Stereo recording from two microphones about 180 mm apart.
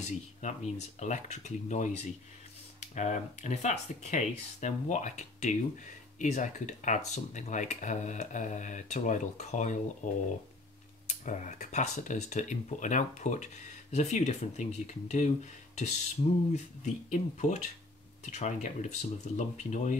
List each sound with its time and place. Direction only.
0.0 s speech: 40° left (ahead or behind)